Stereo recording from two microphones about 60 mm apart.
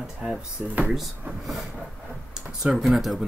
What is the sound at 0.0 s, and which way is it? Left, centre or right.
Speech, centre.